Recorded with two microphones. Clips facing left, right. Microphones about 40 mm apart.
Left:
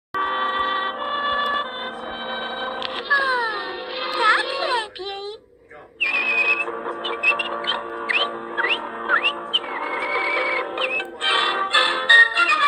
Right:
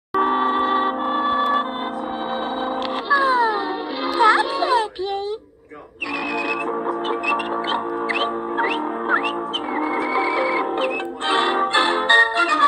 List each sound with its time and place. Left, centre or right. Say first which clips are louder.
0.2 s train: right 3 dB; left
1.1 s music: right 1 dB; left
3.1 s music: right 3 dB; left
6.1 s music: left 3 dB; left